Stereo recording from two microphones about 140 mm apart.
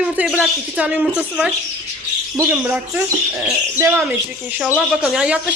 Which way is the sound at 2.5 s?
5° right (ahead or behind).